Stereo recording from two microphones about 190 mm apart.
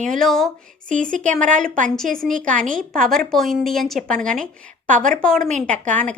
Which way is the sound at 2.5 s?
45° right (ahead or behind).